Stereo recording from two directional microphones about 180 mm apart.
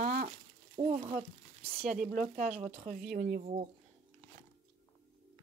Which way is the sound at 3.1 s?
60° right (ahead or behind).